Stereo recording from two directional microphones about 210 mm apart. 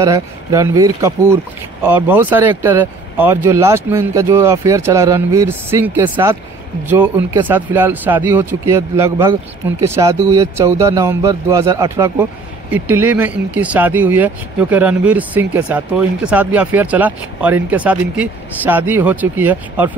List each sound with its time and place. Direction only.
0.0 s a man's voice: 15° right (ahead or behind)
7.4 s a man's voice: 10° right (ahead or behind)